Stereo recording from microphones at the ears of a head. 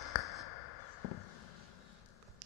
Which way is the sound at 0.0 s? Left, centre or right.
Left.